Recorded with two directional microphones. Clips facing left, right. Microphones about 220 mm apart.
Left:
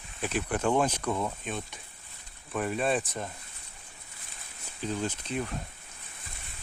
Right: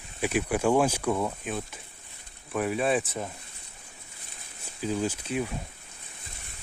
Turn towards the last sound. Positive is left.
turn(degrees=-10)  # may be behind; listen again after turning